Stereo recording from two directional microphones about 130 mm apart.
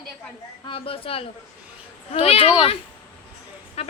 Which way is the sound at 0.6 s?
45° left (ahead or behind).